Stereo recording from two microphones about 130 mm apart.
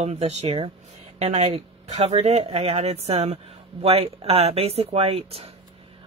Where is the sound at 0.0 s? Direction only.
55° right (ahead or behind).